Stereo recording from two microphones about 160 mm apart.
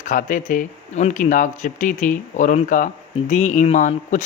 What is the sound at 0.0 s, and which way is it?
Speech, 55° left (ahead or behind).